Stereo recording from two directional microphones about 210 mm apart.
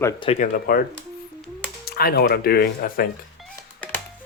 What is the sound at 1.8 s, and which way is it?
Speech, 45° left (ahead or behind).